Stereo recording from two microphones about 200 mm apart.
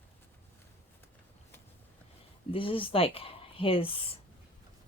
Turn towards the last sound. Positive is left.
turn(degrees=25)  # may be behind; listen again after turning